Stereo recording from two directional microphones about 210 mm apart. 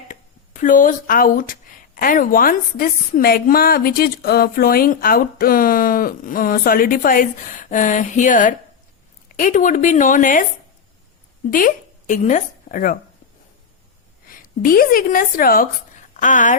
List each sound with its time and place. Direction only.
0.1 s a woman's voice: 40° left (ahead or behind)
11.5 s a woman's voice: 40° left (ahead or behind)
14.3 s speech: 40° left (ahead or behind)